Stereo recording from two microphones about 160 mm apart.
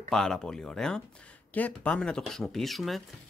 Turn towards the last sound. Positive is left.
turn(degrees=0)  # may be behind; listen again after turning